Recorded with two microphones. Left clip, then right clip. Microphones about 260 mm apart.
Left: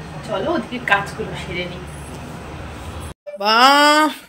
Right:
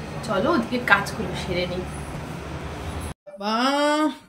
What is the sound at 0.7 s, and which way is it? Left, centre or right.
Speech, centre.